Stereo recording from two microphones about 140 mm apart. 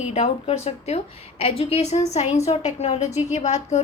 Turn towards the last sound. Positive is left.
turn(degrees=55)  # may be behind; listen again after turning